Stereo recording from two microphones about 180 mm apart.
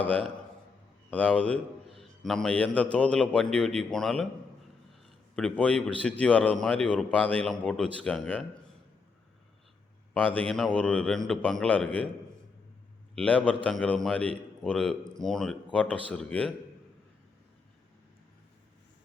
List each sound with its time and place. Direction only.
0.0 s a man's voice: 10° left (ahead or behind)
5.4 s a man's voice: 5° left (ahead or behind)
10.2 s a man's voice: 5° left (ahead or behind)
13.1 s a man's voice: 10° left (ahead or behind)